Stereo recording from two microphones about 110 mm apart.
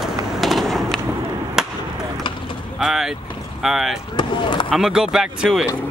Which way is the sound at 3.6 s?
5° right (ahead or behind).